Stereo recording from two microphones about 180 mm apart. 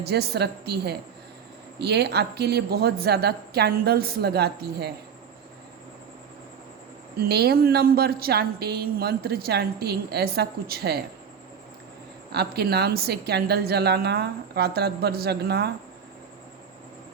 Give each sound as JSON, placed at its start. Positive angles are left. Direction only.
{"t": 0.0, "sound": "a woman's voice", "side_deg": -65}
{"t": 7.2, "sound": "a woman's voice", "side_deg": -60}
{"t": 12.3, "sound": "a woman's voice", "side_deg": -60}